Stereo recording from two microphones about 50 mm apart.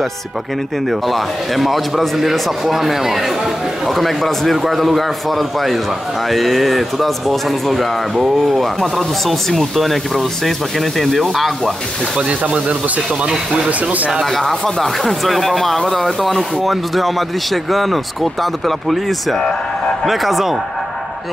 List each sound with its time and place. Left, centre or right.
0.8 s a man's voice: centre
12.2 s speech: centre
14.2 s a man's voice: centre